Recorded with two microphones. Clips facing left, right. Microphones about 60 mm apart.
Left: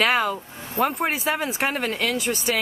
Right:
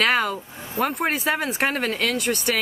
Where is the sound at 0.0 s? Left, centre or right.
Centre.